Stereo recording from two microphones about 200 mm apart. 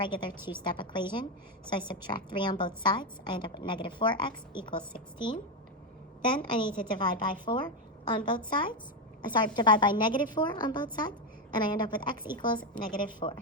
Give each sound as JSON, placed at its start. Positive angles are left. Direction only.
{"t": 0.0, "sound": "a woman's voice", "side_deg": 20}
{"t": 0.3, "sound": "a woman's voice", "side_deg": -10}
{"t": 0.6, "sound": "a woman's voice", "side_deg": 25}
{"t": 6.4, "sound": "a woman's voice", "side_deg": 25}